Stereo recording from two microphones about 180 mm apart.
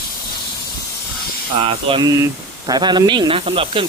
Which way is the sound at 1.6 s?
30° right (ahead or behind).